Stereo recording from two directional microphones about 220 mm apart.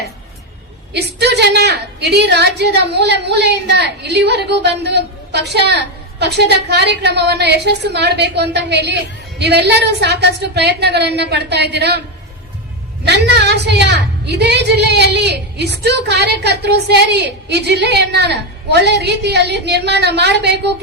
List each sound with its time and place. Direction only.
0.9 s a woman's voice: 50° right (ahead or behind)
13.1 s a woman's voice: 50° right (ahead or behind)